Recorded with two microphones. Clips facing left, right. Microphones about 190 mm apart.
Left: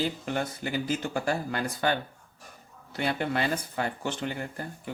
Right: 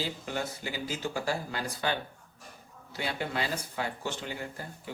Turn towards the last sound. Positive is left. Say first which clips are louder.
# left 5 dB
turn(degrees=55)  # may be behind; listen again after turning